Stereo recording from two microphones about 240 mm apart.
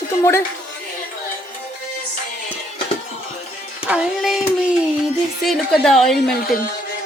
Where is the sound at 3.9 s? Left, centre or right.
Centre.